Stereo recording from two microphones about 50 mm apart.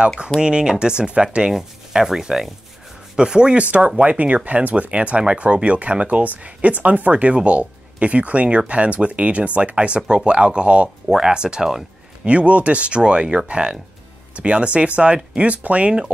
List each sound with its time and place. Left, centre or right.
0.4 s speech: centre